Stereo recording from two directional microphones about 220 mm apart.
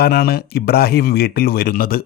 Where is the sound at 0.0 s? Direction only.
45° left (ahead or behind).